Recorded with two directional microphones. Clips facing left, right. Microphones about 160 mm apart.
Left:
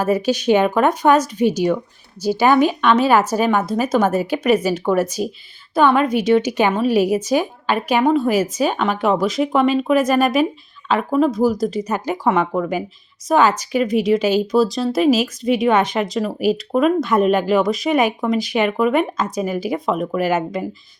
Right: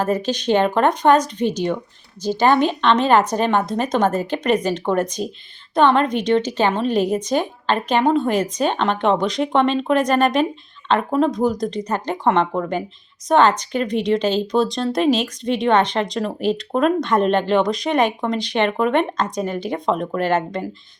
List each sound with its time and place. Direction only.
0.0 s a woman's voice: 10° left (ahead or behind)